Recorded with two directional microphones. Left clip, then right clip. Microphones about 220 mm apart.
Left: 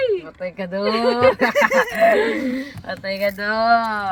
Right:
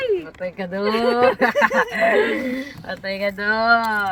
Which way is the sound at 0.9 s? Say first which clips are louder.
Left 1 dB; 20° right (ahead or behind).